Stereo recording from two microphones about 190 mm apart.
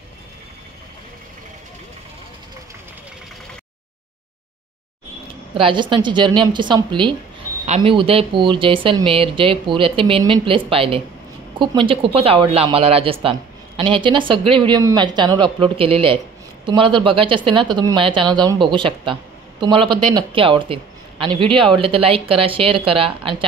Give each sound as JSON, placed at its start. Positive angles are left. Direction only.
{"t": 5.5, "sound": "speech", "side_deg": -25}